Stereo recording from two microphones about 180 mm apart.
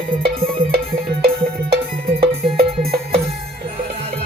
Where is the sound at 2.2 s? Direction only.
55° right (ahead or behind).